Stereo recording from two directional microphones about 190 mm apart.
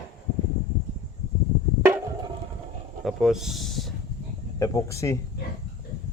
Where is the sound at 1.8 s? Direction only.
10° right (ahead or behind).